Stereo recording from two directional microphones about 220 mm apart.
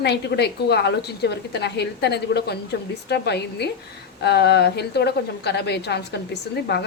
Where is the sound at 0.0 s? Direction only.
50° left (ahead or behind).